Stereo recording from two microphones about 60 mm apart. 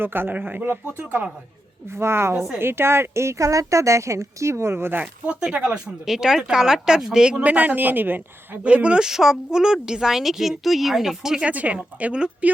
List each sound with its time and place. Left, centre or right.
0.0 s speech: right
1.9 s a woman's voice: right
4.9 s speech: right
7.4 s speech: right
8.6 s speech: centre
11.4 s speech: right